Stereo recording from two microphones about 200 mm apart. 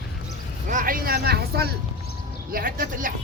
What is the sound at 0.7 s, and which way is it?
Speech, 45° right (ahead or behind).